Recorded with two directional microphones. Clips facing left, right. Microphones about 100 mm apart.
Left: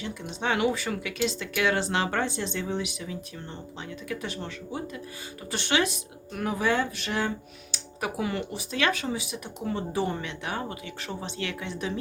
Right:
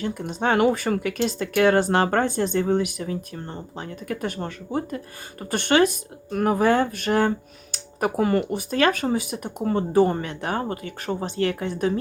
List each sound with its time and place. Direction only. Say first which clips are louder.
0.0 s speech: right 7 dB; 45° right (ahead or behind)